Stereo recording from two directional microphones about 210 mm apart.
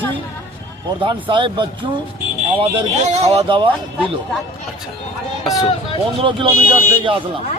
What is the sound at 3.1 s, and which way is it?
Speech, 30° right (ahead or behind).